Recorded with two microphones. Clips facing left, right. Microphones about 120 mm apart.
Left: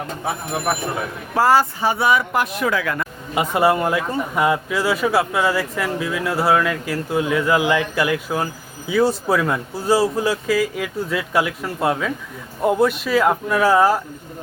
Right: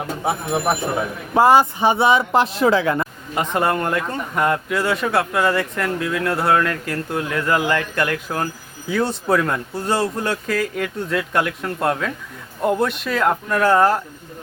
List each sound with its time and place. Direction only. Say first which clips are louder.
0.3 s speech: right 3 dB; 20° right (ahead or behind)
3.3 s speech: left 3 dB; 5° left (ahead or behind)